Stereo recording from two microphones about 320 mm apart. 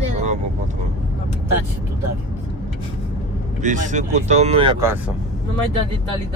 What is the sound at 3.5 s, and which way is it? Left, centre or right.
Speech, right.